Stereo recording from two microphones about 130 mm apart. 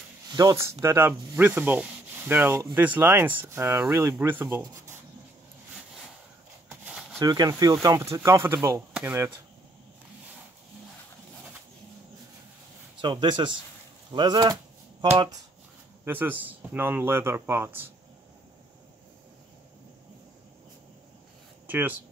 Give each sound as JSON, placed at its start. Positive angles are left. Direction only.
{"t": 0.3, "sound": "speech", "side_deg": -30}
{"t": 0.6, "sound": "speech", "side_deg": -20}
{"t": 7.2, "sound": "speech", "side_deg": -30}
{"t": 13.0, "sound": "speech", "side_deg": -35}
{"t": 14.1, "sound": "a sound", "side_deg": -35}
{"t": 16.1, "sound": "speech", "side_deg": -15}
{"t": 21.6, "sound": "speech", "side_deg": -15}